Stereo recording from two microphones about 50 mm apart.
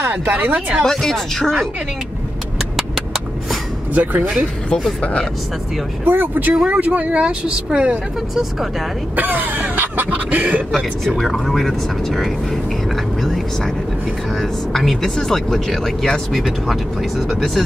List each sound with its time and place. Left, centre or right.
0.3 s cough: right
0.8 s speech: centre
3.9 s speech: right
6.0 s cough: right
6.5 s speech: centre
9.1 s cough: right
10.1 s speech: right
11.3 s speech: centre
14.4 s speech: centre